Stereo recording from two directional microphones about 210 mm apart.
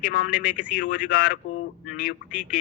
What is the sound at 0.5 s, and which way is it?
Speech, 5° right (ahead or behind).